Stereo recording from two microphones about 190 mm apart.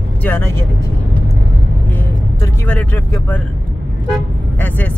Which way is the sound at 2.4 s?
10° left (ahead or behind).